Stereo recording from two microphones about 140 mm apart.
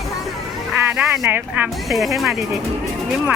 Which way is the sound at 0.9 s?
15° right (ahead or behind).